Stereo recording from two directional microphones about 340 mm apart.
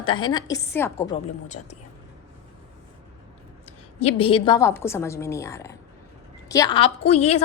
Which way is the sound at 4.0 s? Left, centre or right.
Centre.